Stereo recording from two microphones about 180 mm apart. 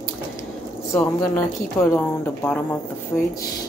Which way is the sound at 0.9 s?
10° left (ahead or behind).